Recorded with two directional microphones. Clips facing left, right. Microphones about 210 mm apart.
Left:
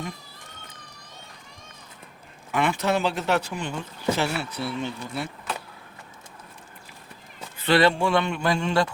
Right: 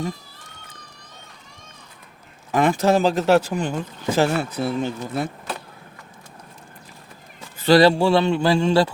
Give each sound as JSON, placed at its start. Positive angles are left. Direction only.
{"t": 2.5, "sound": "speech", "side_deg": -40}
{"t": 7.6, "sound": "speech", "side_deg": -35}